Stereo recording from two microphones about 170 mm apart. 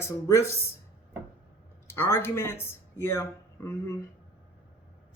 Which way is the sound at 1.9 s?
15° left (ahead or behind).